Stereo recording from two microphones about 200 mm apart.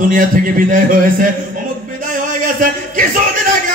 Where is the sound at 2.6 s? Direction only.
40° right (ahead or behind).